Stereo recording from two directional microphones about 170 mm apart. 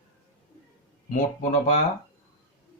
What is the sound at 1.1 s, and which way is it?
Speech, 45° left (ahead or behind).